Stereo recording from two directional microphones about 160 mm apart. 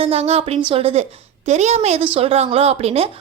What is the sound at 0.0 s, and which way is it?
A woman's voice, 40° right (ahead or behind).